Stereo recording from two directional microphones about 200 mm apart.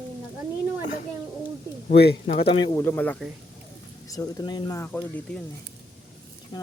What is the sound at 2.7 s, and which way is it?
Speech, 10° left (ahead or behind).